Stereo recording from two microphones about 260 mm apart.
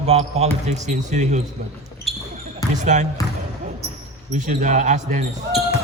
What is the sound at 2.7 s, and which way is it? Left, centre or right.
Speech, right.